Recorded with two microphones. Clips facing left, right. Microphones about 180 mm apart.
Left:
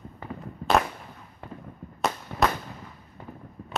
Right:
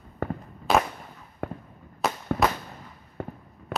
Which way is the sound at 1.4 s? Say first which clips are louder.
Right 8 dB; 60° right (ahead or behind).